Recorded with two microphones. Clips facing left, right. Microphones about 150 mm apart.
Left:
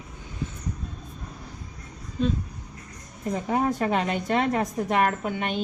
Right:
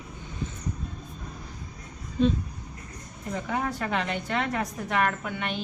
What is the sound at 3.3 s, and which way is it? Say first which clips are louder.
A woman's voice: left 5 dB; 40° left (ahead or behind).